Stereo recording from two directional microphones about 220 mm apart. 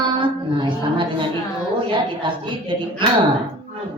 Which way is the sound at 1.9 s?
20° right (ahead or behind).